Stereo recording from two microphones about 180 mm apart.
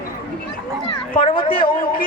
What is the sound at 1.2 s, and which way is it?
Speech, 30° left (ahead or behind).